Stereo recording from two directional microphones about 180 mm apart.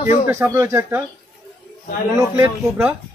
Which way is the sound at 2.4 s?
5° right (ahead or behind).